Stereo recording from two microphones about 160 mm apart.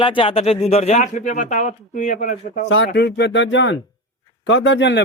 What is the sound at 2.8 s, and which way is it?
Speech, 85° left.